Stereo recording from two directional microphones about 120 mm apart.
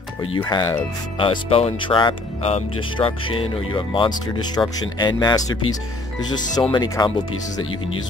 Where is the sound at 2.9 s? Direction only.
50° left (ahead or behind).